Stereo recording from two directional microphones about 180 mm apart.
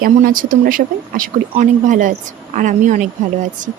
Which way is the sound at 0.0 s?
50° right (ahead or behind).